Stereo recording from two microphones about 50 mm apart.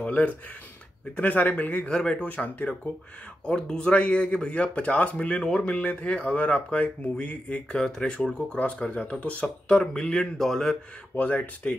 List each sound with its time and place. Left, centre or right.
0.0 s speech: left
3.4 s speech: centre
7.7 s speech: centre
8.4 s speech: left
9.7 s speech: centre
11.1 s speech: left